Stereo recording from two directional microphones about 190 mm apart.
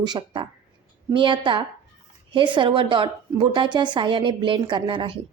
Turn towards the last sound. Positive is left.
turn(degrees=-25)  # may be behind; listen again after turning